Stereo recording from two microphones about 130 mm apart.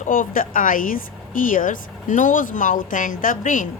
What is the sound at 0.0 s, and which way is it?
A woman's voice, 90° left.